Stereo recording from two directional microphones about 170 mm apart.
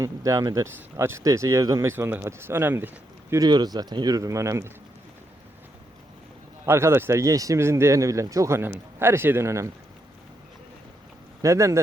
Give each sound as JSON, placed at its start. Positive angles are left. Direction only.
{"t": 0.0, "sound": "speech", "side_deg": -20}
{"t": 6.7, "sound": "speech", "side_deg": -15}
{"t": 11.4, "sound": "speech", "side_deg": -15}